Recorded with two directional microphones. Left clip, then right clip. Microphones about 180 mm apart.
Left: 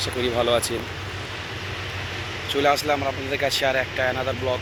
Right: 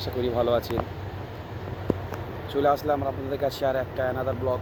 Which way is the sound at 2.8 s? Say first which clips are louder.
Left 3 dB; 20° left (ahead or behind).